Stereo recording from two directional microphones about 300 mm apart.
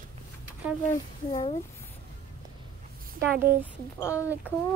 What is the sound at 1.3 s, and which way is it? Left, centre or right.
Speech, left.